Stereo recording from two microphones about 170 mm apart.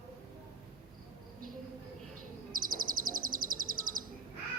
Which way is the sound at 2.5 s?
55° right (ahead or behind).